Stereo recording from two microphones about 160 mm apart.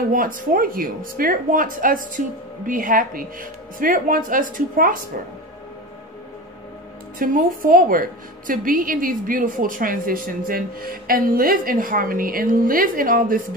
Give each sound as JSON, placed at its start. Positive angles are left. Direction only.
{"t": 0.1, "sound": "a woman's voice", "side_deg": -60}
{"t": 7.2, "sound": "a woman's voice", "side_deg": -60}